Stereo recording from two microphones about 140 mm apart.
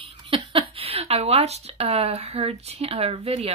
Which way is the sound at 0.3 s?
40° right (ahead or behind).